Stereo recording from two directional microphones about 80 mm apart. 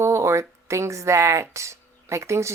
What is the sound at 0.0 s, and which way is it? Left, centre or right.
Speech, right.